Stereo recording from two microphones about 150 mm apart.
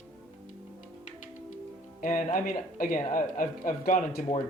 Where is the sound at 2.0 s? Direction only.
60° left (ahead or behind).